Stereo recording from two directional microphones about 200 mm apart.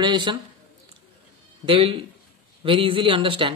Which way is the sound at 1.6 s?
25° right (ahead or behind).